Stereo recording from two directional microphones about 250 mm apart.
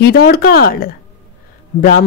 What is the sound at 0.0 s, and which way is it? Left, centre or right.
Speech, left.